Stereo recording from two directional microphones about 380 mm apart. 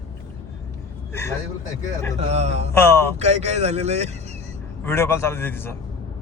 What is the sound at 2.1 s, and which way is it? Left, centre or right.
Speech, centre.